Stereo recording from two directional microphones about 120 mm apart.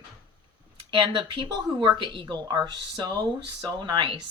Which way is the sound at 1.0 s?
40° right (ahead or behind).